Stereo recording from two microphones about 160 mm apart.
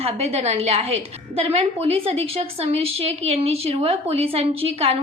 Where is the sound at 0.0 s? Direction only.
40° right (ahead or behind).